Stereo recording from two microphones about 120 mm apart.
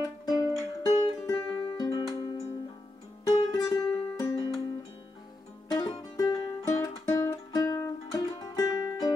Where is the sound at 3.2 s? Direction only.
30° left (ahead or behind).